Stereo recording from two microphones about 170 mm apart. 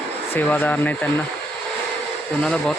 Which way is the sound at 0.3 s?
10° left (ahead or behind).